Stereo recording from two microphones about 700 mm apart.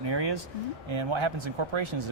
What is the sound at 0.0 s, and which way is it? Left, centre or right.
Speech, right.